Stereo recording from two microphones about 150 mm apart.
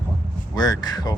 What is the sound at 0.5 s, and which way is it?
Speech, 25° left (ahead or behind).